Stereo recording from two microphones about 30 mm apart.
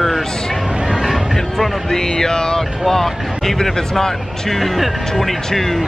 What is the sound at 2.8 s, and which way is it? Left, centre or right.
Speech, centre.